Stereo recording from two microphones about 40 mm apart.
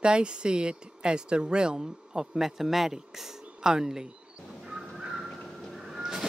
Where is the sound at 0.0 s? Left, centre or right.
Right.